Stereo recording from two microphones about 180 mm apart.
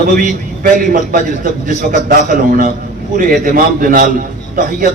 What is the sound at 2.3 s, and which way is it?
A man's voice, 50° right (ahead or behind).